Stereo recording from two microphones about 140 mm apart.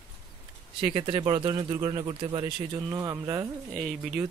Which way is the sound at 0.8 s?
35° right (ahead or behind).